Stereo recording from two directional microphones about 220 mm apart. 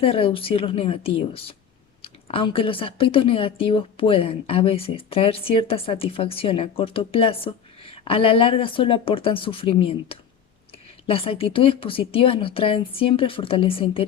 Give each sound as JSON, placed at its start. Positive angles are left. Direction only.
{"t": 0.0, "sound": "speech", "side_deg": 25}